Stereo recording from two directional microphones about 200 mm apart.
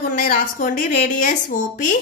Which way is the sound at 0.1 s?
40° left (ahead or behind).